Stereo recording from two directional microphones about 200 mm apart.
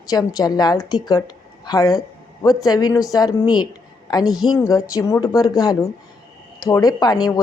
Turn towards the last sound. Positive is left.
turn(degrees=20)  # may be behind; listen again after turning